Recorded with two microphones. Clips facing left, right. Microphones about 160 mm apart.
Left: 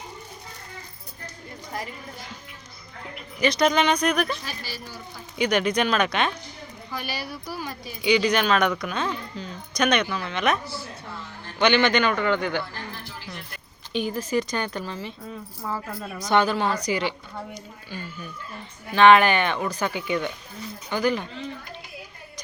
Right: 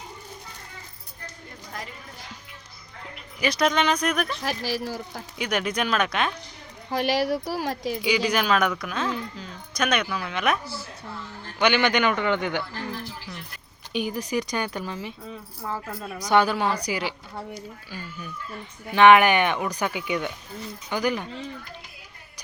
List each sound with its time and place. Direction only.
3.4 s speech: 5° right (ahead or behind)
4.4 s speech: 90° right
5.4 s speech: centre (ahead or behind)
6.9 s speech: 90° right
8.0 s speech: 5° right (ahead or behind)
11.6 s a woman's voice: 10° right (ahead or behind)
13.9 s a woman's voice: 15° right (ahead or behind)
15.6 s speech: centre (ahead or behind)
16.1 s a woman's voice: 10° right (ahead or behind)